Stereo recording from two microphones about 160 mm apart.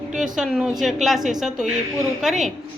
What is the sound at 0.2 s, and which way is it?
A woman's voice, centre (ahead or behind).